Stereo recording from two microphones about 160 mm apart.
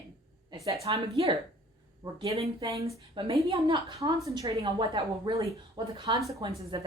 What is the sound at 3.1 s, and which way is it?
Speech, 35° right (ahead or behind).